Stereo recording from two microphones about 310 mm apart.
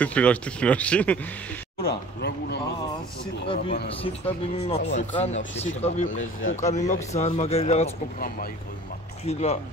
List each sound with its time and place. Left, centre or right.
0.0 s speech: centre
1.8 s speech: left
4.0 s speech: centre
6.0 s speech: left
6.5 s speech: left